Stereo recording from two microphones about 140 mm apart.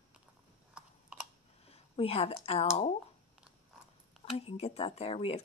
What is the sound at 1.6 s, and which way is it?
Speech, 45° left (ahead or behind).